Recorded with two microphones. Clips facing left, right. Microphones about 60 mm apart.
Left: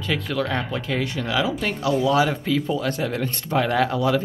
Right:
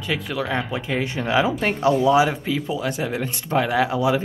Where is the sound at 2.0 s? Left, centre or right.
Centre.